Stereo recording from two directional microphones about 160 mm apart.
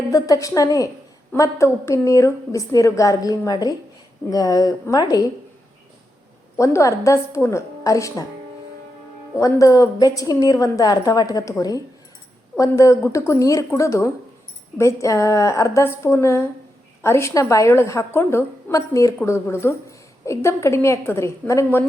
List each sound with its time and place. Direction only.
0.1 s a woman's voice: 20° left (ahead or behind)
6.6 s a woman's voice: 20° left (ahead or behind)
9.4 s a woman's voice: 20° left (ahead or behind)